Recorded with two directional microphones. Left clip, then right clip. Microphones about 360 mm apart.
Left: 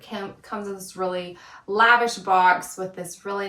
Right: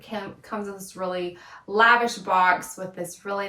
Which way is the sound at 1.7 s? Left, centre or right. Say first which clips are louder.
Left 1 dB; centre.